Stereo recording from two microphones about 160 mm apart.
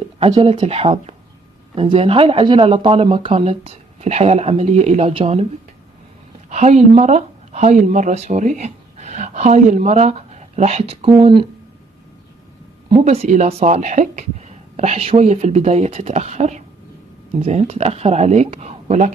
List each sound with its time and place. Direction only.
0.2 s speech: 35° right (ahead or behind)
6.5 s speech: 45° right (ahead or behind)
12.9 s speech: 40° right (ahead or behind)